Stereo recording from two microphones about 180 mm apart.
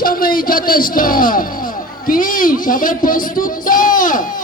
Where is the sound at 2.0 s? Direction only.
50° left (ahead or behind).